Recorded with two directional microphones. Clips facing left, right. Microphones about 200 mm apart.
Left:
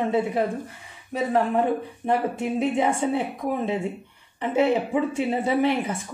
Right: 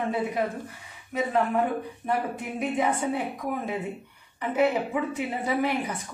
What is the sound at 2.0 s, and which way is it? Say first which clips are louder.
Speech: left 6 dB; 25° left (ahead or behind).